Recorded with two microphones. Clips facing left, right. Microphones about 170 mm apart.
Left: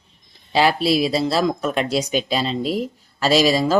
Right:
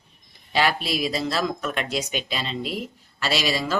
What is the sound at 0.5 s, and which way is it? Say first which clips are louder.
Speech: left 6 dB; 30° left (ahead or behind).